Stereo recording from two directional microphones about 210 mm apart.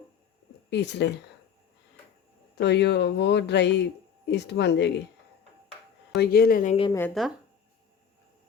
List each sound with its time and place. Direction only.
0.7 s speech: 55° left (ahead or behind)
2.6 s speech: 55° left (ahead or behind)
6.1 s speech: 45° left (ahead or behind)
7.1 s speech: centre (ahead or behind)